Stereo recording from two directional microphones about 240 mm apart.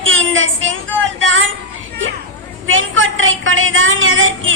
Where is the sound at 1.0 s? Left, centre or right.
Right.